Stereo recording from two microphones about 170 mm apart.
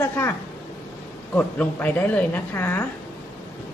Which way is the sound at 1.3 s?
10° left (ahead or behind).